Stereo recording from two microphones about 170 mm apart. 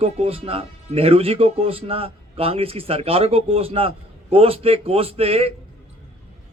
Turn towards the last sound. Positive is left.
turn(degrees=-35)  # may be behind; listen again after turning